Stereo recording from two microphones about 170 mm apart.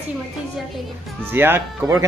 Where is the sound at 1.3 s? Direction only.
10° right (ahead or behind).